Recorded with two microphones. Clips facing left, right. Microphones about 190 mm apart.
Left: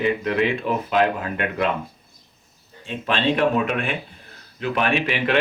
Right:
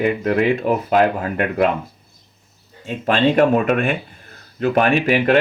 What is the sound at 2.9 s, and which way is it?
Speech, 45° right (ahead or behind).